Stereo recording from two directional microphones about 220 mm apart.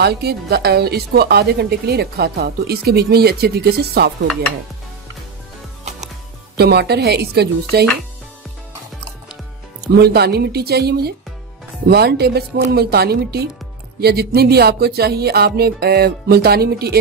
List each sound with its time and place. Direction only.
0.0 s a woman's voice: 45° right (ahead or behind)
6.5 s a woman's voice: 45° right (ahead or behind)
9.9 s a woman's voice: 45° right (ahead or behind)